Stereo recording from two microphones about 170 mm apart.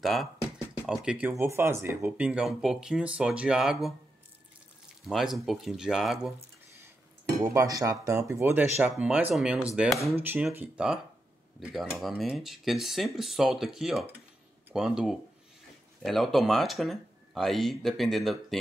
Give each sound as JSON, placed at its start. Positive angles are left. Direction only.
{"t": 0.0, "sound": "speech", "side_deg": 0}
{"t": 5.0, "sound": "speech", "side_deg": 0}
{"t": 7.4, "sound": "speech", "side_deg": -20}